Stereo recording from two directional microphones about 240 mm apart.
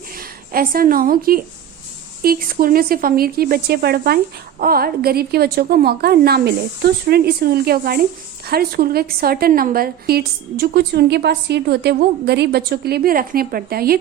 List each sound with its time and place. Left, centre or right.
0.2 s a woman's voice: right